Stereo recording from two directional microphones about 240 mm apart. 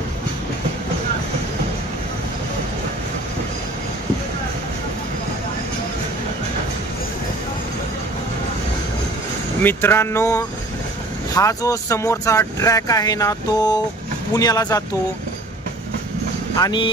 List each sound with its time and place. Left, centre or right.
9.6 s speech: centre
16.5 s speech: centre